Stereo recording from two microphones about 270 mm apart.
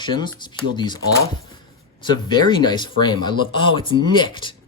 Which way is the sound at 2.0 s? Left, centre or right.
Centre.